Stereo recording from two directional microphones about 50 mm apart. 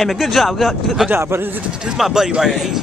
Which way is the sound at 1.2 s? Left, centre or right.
Right.